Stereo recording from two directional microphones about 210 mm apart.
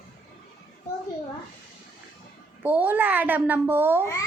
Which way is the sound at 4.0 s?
15° left (ahead or behind).